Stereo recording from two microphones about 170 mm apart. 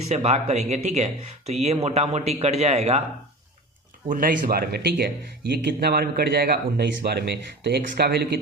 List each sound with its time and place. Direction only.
0.1 s speech: 40° right (ahead or behind)
4.1 s speech: 55° right (ahead or behind); by 8.4 s 75° right (ahead or behind)